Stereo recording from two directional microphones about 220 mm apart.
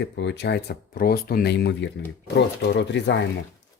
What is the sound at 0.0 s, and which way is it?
Speech, 50° left (ahead or behind).